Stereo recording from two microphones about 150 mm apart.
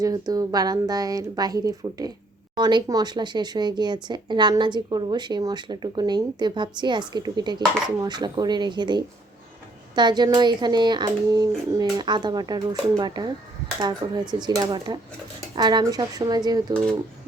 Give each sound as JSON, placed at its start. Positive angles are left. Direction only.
{"t": 0.0, "sound": "speech", "side_deg": -25}